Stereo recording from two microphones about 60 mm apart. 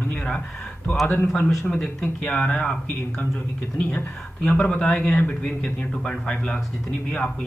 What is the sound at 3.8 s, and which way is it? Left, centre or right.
Speech, left.